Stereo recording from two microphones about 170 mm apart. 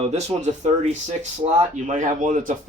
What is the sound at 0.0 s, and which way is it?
Speech, 40° right (ahead or behind).